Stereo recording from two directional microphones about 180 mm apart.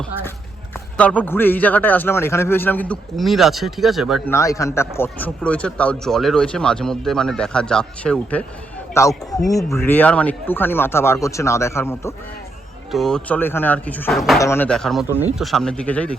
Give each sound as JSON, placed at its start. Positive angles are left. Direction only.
{"t": 0.9, "sound": "a man's voice", "side_deg": 10}
{"t": 4.3, "sound": "a man's voice", "side_deg": 15}
{"t": 12.9, "sound": "a man's voice", "side_deg": 0}
{"t": 14.4, "sound": "a man's voice", "side_deg": 10}